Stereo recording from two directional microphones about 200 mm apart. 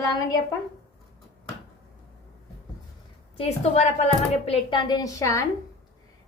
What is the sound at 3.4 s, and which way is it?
A woman's voice, 30° left (ahead or behind).